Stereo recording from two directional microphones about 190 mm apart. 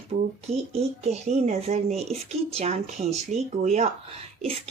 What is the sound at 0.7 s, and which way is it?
A child's voice, 35° right (ahead or behind).